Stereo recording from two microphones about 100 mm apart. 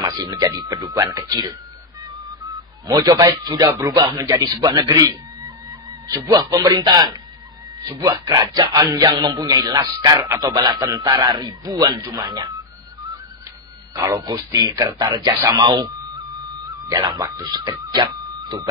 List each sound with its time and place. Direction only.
0.0 s speech: 40° right (ahead or behind)
2.9 s speech: 35° right (ahead or behind)
3.6 s music: 25° right (ahead or behind)
4.2 s a man's voice: 40° right (ahead or behind)
14.2 s a man's voice: 45° right (ahead or behind)
16.9 s speech: 40° right (ahead or behind)